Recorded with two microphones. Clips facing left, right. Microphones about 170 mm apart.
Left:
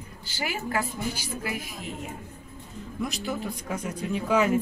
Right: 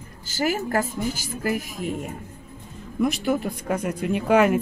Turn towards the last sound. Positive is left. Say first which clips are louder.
# right 5 dB
turn(degrees=-65)  # may be behind; listen again after turning